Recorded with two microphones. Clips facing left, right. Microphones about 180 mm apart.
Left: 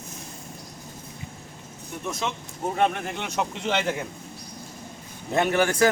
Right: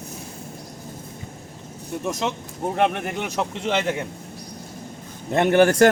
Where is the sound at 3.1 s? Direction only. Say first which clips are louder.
Right 3 dB; 5° right (ahead or behind).